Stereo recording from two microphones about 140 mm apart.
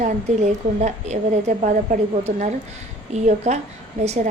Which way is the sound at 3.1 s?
55° right (ahead or behind).